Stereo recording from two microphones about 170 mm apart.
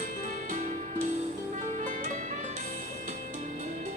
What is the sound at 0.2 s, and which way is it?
Music, 50° right (ahead or behind).